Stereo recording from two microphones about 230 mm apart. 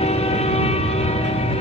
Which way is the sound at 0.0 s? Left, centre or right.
Left.